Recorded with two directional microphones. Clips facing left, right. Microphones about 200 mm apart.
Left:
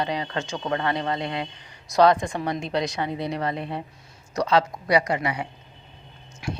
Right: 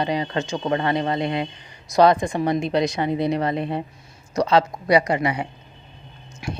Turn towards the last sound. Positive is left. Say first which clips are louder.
# right 1 dB
turn(degrees=-15)  # may be behind; listen again after turning